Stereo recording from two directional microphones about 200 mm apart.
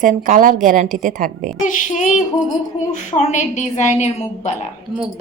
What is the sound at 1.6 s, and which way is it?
A woman's voice, 40° left (ahead or behind).